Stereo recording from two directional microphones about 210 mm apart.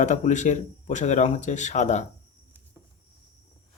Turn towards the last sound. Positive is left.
turn(degrees=35)  # may be behind; listen again after turning